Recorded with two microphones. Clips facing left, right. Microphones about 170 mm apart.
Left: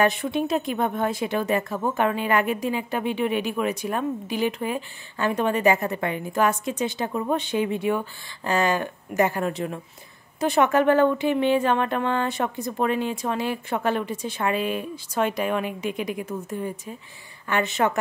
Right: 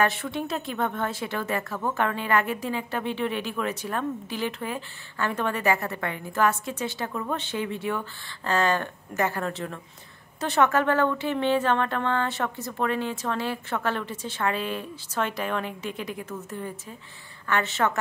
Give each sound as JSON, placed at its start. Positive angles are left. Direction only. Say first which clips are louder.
{"t": 0.0, "sound": "speech", "louder": "left 4 dB", "side_deg": 15}